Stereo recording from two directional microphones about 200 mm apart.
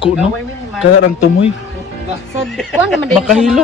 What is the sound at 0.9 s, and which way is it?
Speech, 90° left.